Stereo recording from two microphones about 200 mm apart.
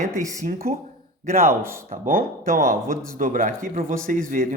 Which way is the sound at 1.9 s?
40° right (ahead or behind).